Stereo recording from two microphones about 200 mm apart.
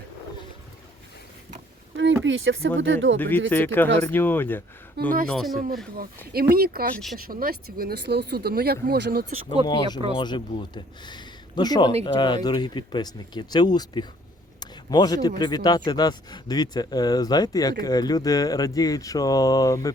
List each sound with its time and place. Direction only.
2.2 s speech: 75° right (ahead or behind)
3.2 s speech: 10° left (ahead or behind)
5.0 s speech: 55° right (ahead or behind)
5.3 s speech: centre (ahead or behind)
6.5 s speech: 50° right (ahead or behind)
6.9 s speech: centre (ahead or behind)
7.2 s speech: 45° right (ahead or behind)
9.6 s speech: 20° left (ahead or behind)
14.6 s a sound: 20° left (ahead or behind)
15.4 s speech: 20° left (ahead or behind)